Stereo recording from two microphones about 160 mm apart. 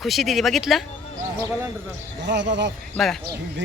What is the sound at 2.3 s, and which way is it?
Speech, 90° right.